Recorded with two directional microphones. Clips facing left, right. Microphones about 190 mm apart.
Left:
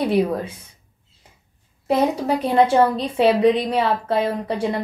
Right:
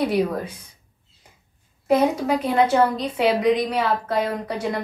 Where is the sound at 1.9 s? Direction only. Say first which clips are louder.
Even; 30° left (ahead or behind).